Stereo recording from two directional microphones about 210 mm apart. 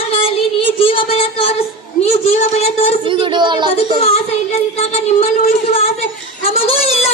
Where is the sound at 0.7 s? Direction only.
25° left (ahead or behind).